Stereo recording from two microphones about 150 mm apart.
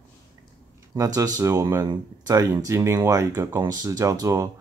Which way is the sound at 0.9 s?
20° right (ahead or behind).